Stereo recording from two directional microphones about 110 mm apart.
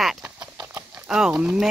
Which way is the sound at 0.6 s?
20° right (ahead or behind).